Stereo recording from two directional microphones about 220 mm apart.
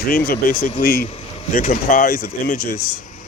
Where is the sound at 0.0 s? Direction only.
40° left (ahead or behind).